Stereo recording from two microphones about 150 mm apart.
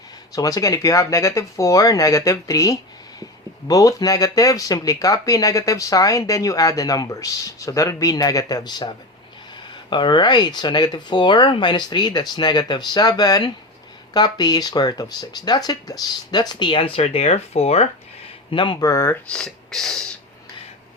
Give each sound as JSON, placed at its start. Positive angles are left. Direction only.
{"t": 0.3, "sound": "speech", "side_deg": 20}
{"t": 18.5, "sound": "speech", "side_deg": 30}
{"t": 19.3, "sound": "speech", "side_deg": 5}